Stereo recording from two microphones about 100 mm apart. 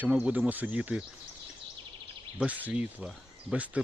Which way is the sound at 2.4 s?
15° right (ahead or behind).